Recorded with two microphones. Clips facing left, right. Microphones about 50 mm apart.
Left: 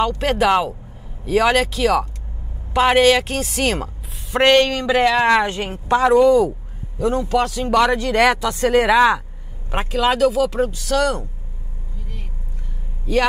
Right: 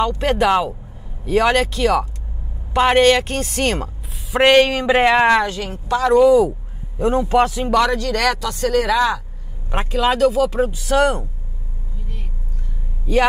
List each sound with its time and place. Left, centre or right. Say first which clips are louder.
0.2 s a woman's voice: right 1 dB; centre
4.9 s a man's voice: right 2 dB; right
5.5 s speech: left 2 dB; left
6.1 s speech: right 3 dB; centre
7.0 s a man's voice: right 3 dB; right
7.9 s speech: left 3 dB; left
9.7 s a woman's voice: even; centre
10.7 s a man's voice: right 2 dB; centre